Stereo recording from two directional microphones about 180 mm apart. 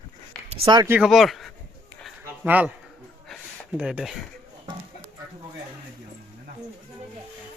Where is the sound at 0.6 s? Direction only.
20° right (ahead or behind).